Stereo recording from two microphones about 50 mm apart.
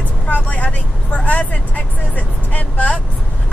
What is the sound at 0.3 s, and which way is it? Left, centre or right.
Vehicle, left.